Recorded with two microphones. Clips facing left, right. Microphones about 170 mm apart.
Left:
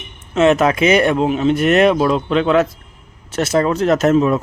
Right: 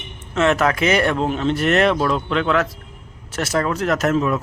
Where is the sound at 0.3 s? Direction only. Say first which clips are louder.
Left 5 dB; 20° left (ahead or behind).